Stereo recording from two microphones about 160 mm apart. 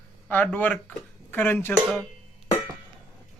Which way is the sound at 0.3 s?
10° left (ahead or behind).